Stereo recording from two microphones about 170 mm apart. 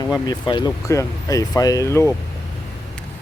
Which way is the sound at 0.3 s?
25° left (ahead or behind).